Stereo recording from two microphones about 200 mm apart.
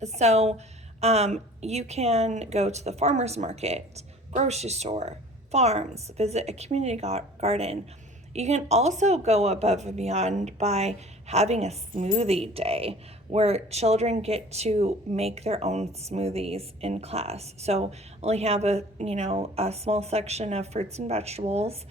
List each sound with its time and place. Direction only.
0.0 s speech: 35° right (ahead or behind)